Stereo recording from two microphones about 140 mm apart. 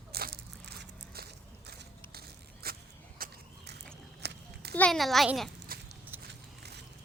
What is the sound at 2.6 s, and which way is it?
Vehicle, 90° right.